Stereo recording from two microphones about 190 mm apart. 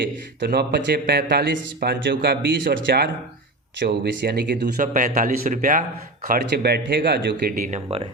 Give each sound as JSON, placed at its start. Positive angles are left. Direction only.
{"t": 0.3, "sound": "a man's voice", "side_deg": -60}